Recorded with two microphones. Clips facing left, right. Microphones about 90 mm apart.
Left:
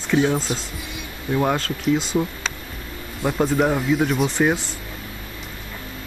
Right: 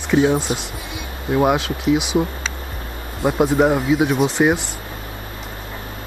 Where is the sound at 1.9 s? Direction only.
75° right (ahead or behind).